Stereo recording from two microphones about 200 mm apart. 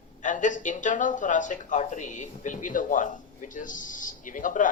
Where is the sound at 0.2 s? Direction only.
40° left (ahead or behind).